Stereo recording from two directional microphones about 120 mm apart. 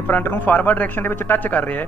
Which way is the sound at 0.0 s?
15° left (ahead or behind).